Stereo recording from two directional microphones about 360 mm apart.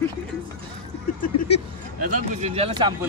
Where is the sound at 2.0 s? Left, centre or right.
Centre.